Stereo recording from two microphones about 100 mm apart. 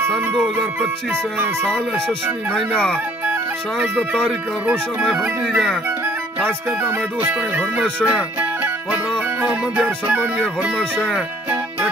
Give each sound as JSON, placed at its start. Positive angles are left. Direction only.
{"t": 0.0, "sound": "music", "side_deg": -20}
{"t": 1.7, "sound": "speech", "side_deg": 5}
{"t": 3.7, "sound": "music", "side_deg": -15}
{"t": 5.4, "sound": "speech", "side_deg": 5}
{"t": 7.3, "sound": "music", "side_deg": -15}
{"t": 10.8, "sound": "speech", "side_deg": 10}